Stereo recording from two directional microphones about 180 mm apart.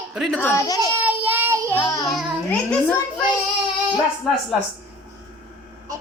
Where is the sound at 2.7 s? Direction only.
5° left (ahead or behind).